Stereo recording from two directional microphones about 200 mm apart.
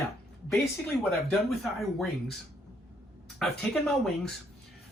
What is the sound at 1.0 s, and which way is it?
Speech, centre (ahead or behind).